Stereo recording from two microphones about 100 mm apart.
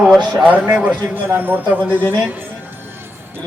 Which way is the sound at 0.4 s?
15° right (ahead or behind).